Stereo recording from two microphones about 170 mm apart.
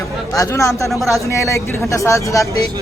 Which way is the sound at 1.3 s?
15° left (ahead or behind).